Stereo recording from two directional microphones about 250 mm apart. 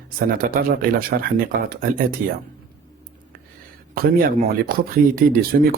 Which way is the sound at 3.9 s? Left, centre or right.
Right.